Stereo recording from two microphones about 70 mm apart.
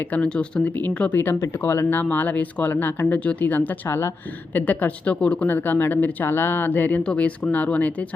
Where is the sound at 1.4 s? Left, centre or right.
Left.